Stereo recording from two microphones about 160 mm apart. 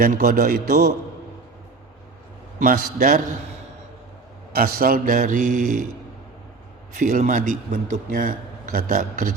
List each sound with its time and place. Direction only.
0.0 s a man's voice: 60° right (ahead or behind)
2.6 s a man's voice: 55° right (ahead or behind)
4.5 s a man's voice: 70° right (ahead or behind); by 5.8 s 50° right (ahead or behind)
6.9 s a man's voice: 55° right (ahead or behind)